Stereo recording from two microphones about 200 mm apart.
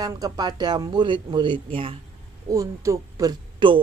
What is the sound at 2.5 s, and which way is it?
Speech, 15° right (ahead or behind).